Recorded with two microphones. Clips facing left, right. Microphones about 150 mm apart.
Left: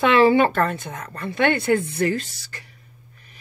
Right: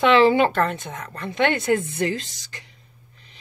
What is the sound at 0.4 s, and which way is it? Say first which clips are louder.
Speech: left 1 dB; 20° right (ahead or behind).